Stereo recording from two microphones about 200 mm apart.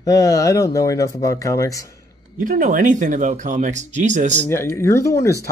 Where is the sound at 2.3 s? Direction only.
45° right (ahead or behind).